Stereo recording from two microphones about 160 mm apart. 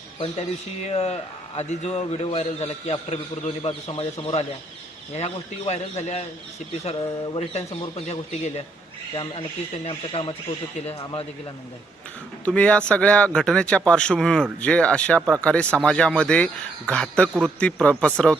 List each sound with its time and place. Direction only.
0.2 s a man's voice: 45° left (ahead or behind)
9.8 s a man's voice: 35° left (ahead or behind)
12.5 s speech: 5° left (ahead or behind)